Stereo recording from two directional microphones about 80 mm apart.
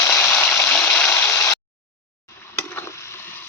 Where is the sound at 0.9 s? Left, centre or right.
Centre.